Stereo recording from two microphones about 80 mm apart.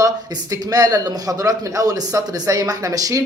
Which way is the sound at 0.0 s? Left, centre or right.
Right.